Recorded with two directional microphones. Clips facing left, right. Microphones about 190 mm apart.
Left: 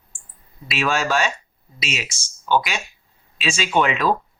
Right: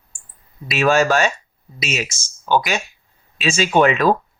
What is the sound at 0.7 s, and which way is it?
Speech, 45° right (ahead or behind).